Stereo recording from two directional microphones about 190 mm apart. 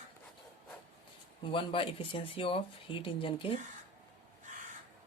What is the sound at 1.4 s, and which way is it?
Speech, 25° left (ahead or behind).